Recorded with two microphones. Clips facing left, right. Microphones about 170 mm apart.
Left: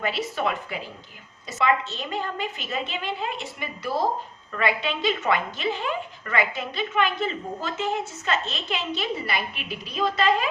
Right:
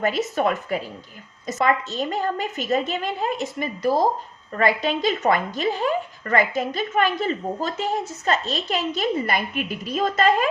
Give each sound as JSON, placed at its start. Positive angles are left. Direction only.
{"t": 0.0, "sound": "a woman's voice", "side_deg": -45}